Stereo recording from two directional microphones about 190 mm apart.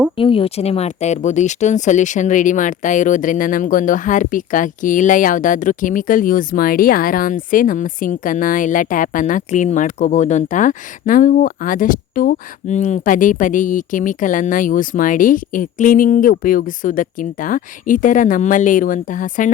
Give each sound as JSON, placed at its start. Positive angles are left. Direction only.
{"t": 0.2, "sound": "speech", "side_deg": 30}